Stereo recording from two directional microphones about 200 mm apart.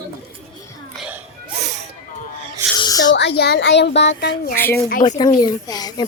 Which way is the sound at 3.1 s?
60° left (ahead or behind).